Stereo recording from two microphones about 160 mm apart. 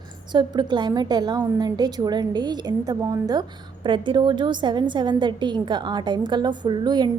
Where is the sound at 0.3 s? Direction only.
30° right (ahead or behind).